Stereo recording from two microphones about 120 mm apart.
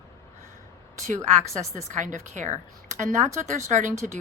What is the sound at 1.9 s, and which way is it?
A woman's voice, 90° right.